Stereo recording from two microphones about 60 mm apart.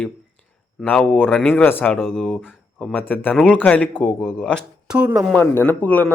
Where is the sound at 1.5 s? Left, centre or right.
Left.